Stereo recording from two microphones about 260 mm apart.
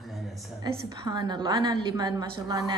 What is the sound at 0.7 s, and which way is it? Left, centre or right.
A woman's voice, centre.